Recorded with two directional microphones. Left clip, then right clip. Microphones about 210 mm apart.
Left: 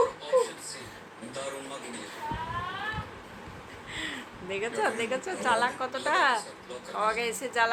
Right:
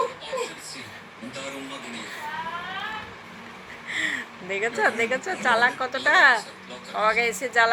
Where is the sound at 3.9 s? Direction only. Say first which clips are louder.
Right 10 dB; centre (ahead or behind).